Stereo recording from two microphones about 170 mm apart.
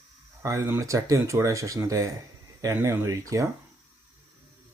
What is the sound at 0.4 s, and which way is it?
Speech, 15° right (ahead or behind).